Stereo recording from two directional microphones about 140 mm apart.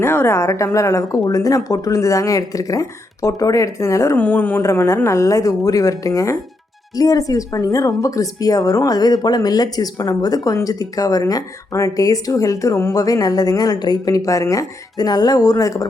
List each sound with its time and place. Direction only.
0.0 s a woman's voice: 15° left (ahead or behind)